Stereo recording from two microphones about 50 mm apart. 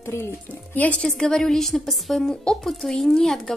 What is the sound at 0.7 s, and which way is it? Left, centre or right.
Speech, left.